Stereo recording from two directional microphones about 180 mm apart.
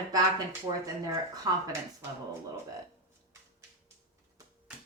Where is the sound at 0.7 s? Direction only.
25° right (ahead or behind).